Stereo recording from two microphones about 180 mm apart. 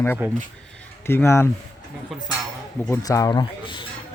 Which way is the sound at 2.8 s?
15° left (ahead or behind).